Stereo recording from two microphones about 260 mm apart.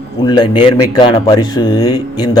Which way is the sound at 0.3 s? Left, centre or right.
Centre.